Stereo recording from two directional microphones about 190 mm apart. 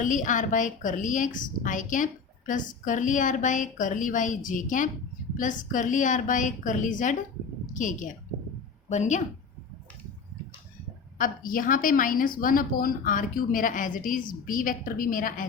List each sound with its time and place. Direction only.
0.0 s a woman's voice: 40° left (ahead or behind)
11.2 s a woman's voice: 45° left (ahead or behind)